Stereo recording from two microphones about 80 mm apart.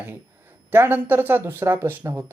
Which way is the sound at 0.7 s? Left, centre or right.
Right.